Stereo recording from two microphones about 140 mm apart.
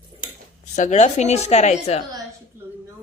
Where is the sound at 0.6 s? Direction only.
60° left (ahead or behind).